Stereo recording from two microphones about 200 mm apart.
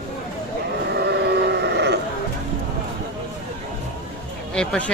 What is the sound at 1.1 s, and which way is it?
Sheep, 55° right (ahead or behind).